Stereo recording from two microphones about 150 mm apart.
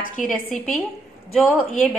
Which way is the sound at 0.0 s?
65° left (ahead or behind).